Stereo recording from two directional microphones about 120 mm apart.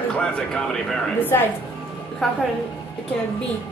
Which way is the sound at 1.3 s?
20° left (ahead or behind).